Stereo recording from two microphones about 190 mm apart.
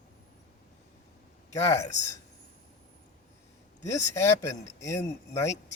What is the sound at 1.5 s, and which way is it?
Speech, 15° left (ahead or behind).